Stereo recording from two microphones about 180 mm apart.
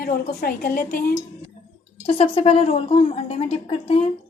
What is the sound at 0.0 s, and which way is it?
A woman's voice, 45° left (ahead or behind).